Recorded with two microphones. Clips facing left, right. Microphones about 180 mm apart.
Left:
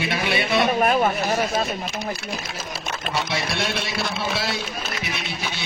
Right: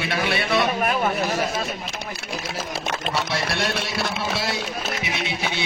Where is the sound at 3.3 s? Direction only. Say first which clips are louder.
Right 1 dB; centre (ahead or behind).